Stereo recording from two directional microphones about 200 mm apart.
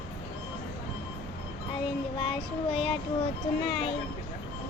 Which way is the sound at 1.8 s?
25° left (ahead or behind).